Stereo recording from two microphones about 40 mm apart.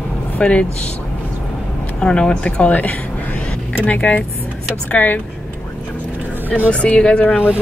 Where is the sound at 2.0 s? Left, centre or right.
Centre.